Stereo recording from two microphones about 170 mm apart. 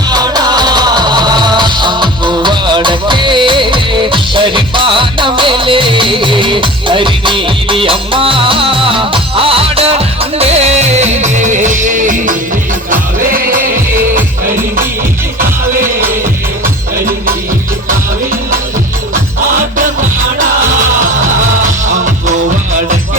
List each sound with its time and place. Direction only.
0.1 s music: 25° right (ahead or behind); by 12.4 s 50° right (ahead or behind)
15.8 s music: 15° right (ahead or behind)